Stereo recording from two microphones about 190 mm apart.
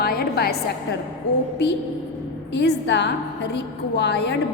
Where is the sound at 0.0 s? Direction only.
55° left (ahead or behind).